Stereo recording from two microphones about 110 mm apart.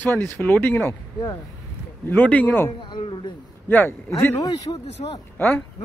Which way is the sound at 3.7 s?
20° left (ahead or behind).